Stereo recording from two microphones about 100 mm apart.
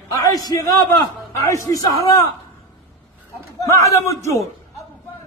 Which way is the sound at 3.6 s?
30° left (ahead or behind).